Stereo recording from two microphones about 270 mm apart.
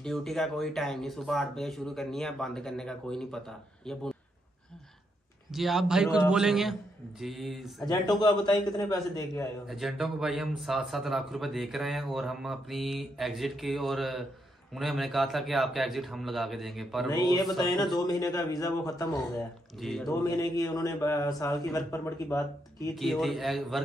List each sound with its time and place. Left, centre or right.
0.0 s a man's voice: centre
5.5 s a man's voice: centre
8.2 s a man's voice: centre
9.7 s a man's voice: centre
17.1 s a man's voice: centre
19.8 s a man's voice: centre
20.1 s a man's voice: centre
22.9 s a man's voice: centre